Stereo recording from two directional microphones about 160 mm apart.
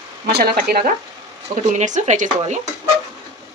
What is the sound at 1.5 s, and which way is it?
Stir, 50° right (ahead or behind).